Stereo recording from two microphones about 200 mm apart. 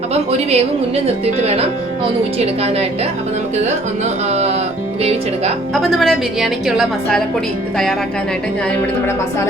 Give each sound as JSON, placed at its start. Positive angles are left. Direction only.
{"t": 0.1, "sound": "speech", "side_deg": -30}
{"t": 4.3, "sound": "speech", "side_deg": -35}
{"t": 5.7, "sound": "a woman's voice", "side_deg": 0}